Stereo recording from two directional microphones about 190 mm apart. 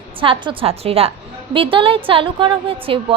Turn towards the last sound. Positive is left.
turn(degrees=-30)  # may be behind; listen again after turning